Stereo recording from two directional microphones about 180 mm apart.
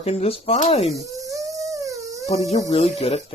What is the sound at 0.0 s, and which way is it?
Speech, 35° left (ahead or behind).